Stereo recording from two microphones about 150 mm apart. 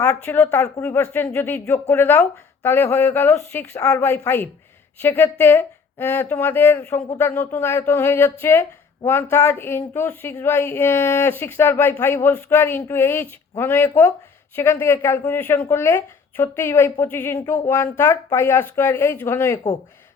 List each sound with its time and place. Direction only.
0.0 s speech: 15° left (ahead or behind)